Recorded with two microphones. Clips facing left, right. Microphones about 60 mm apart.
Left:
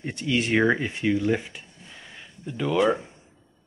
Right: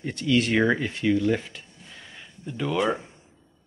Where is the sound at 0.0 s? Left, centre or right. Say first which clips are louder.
Right 3 dB; left.